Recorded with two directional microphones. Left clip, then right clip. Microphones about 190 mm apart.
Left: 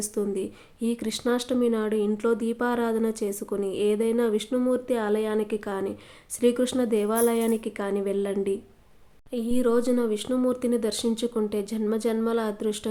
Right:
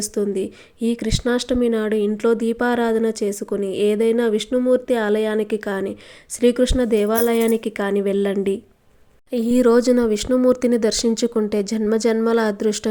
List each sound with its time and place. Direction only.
0.0 s speech: 25° right (ahead or behind)